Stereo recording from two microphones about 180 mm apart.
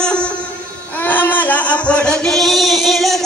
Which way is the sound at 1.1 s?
10° left (ahead or behind).